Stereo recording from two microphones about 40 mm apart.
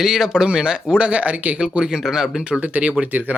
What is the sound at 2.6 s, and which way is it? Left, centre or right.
Speech, right.